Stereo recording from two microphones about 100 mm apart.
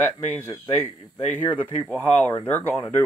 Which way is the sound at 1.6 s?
20° left (ahead or behind).